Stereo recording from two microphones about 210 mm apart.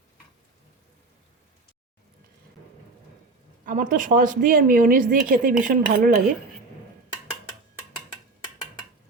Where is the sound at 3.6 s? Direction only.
40° right (ahead or behind).